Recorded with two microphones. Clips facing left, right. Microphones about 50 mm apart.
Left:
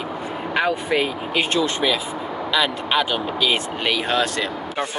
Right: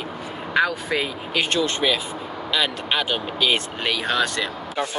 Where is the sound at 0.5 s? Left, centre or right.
Left.